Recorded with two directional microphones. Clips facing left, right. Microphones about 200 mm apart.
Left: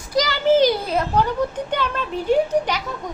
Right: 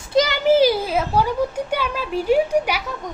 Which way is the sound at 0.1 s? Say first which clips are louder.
Right 3 dB; 25° right (ahead or behind).